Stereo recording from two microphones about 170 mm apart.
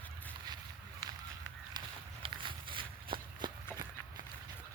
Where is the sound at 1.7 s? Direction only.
30° right (ahead or behind).